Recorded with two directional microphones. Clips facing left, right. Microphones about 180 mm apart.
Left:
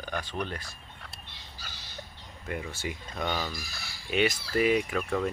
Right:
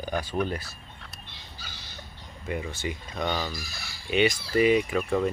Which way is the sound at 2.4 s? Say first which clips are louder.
Right 3 dB; centre (ahead or behind).